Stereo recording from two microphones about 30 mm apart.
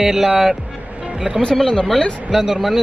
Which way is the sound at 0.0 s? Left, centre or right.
Centre.